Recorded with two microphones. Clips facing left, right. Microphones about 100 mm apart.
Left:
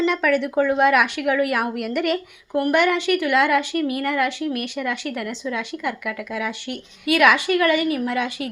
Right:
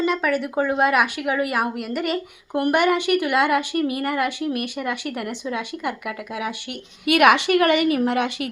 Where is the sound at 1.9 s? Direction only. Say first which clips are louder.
Left 3 dB; 35° right (ahead or behind).